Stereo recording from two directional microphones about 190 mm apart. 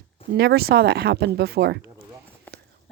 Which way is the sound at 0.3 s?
55° right (ahead or behind).